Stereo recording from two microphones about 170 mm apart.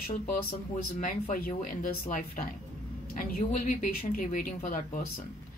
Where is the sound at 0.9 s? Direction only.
45° left (ahead or behind).